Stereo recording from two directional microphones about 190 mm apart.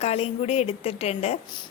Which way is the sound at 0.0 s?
35° left (ahead or behind).